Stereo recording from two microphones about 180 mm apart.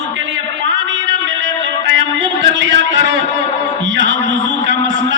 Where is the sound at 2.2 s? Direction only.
90° right.